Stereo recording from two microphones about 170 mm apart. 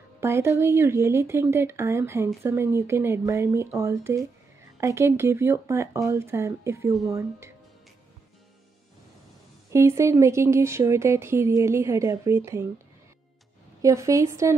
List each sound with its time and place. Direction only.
0.2 s speech: 15° right (ahead or behind)
9.7 s speech: 15° right (ahead or behind)
13.8 s speech: 20° right (ahead or behind)